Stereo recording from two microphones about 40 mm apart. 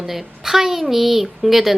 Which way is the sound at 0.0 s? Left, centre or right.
Centre.